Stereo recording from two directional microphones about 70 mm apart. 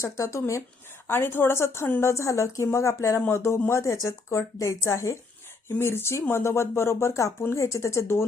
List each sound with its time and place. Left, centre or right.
0.0 s speech: left
1.0 s speech: left